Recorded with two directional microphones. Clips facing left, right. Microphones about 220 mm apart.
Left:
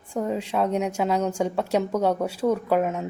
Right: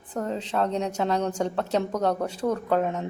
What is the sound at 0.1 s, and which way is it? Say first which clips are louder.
A woman's voice: left 3 dB; 10° left (ahead or behind).